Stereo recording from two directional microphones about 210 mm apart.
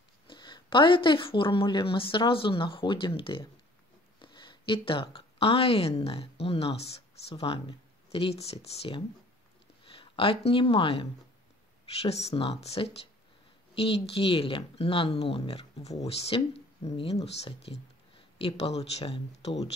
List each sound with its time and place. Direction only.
0.3 s a woman's voice: 20° left (ahead or behind)
18.8 s a woman's voice: 30° left (ahead or behind)